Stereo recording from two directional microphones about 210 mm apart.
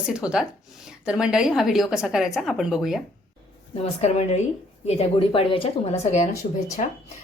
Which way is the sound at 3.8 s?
30° left (ahead or behind).